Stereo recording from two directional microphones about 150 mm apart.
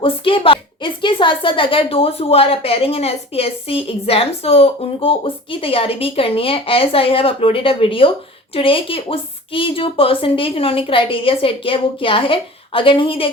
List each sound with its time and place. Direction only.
0.0 s a woman's voice: 35° left (ahead or behind)